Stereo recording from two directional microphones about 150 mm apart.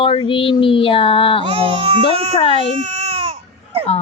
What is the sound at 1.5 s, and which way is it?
Speech, 35° right (ahead or behind).